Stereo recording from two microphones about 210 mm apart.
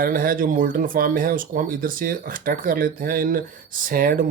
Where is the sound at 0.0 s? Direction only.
40° right (ahead or behind).